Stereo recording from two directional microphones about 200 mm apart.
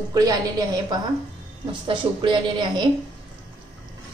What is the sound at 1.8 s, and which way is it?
A woman's voice, 25° right (ahead or behind).